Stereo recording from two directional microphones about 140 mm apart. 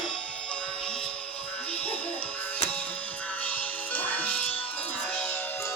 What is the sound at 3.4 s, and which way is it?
Music, 10° left (ahead or behind).